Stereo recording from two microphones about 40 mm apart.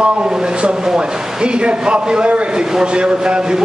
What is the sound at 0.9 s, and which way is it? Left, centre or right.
A man's voice, right.